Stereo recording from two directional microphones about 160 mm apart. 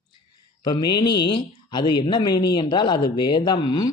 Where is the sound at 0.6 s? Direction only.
25° left (ahead or behind).